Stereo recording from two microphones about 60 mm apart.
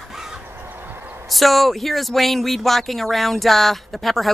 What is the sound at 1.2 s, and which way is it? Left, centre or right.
Speech, centre.